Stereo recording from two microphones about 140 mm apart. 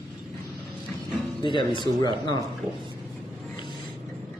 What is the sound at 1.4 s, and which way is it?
Speech, 35° left (ahead or behind).